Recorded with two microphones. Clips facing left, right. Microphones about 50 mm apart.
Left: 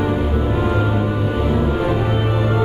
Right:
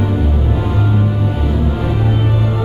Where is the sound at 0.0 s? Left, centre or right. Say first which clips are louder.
Even; centre.